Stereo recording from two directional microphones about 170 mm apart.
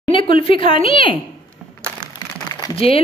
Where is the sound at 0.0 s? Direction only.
30° left (ahead or behind).